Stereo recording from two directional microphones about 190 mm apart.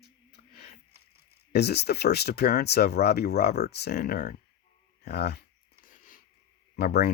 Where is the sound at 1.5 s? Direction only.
60° left (ahead or behind).